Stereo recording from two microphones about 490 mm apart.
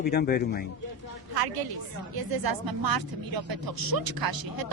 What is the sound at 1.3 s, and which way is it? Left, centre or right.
Speech, right.